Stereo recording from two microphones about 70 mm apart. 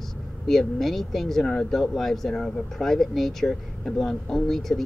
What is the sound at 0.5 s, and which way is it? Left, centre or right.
Speech, centre.